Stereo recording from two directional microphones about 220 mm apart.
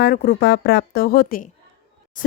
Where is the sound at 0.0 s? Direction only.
40° left (ahead or behind).